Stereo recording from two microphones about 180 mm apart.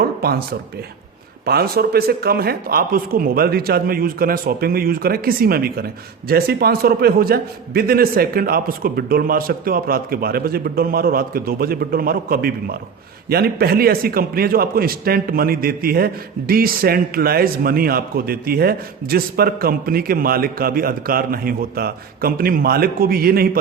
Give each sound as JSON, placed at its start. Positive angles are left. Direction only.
{"t": 0.2, "sound": "speech", "side_deg": -60}
{"t": 1.5, "sound": "speech", "side_deg": -60}